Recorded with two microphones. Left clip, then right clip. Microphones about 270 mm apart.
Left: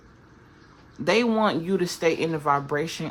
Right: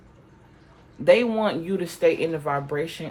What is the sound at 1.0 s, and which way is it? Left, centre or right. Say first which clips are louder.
Speech: right 3 dB; centre.